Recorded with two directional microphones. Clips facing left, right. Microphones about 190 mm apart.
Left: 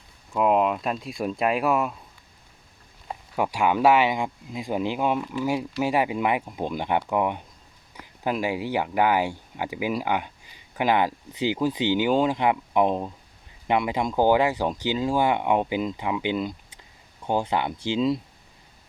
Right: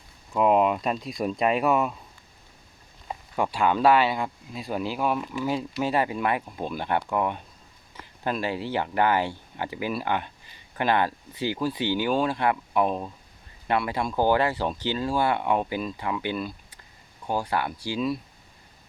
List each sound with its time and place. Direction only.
0.3 s speech: centre (ahead or behind)
3.1 s speech: 10° left (ahead or behind)